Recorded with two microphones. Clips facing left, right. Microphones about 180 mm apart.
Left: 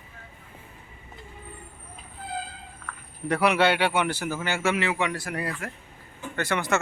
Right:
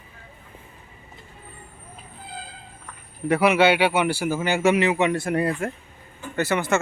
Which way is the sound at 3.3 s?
5° right (ahead or behind).